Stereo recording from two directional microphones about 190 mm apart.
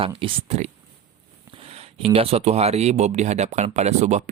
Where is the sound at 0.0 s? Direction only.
30° right (ahead or behind).